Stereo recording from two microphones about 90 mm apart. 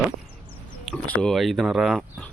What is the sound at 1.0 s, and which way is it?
Speech, 15° left (ahead or behind).